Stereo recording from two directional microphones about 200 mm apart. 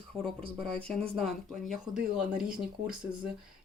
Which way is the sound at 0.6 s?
5° left (ahead or behind).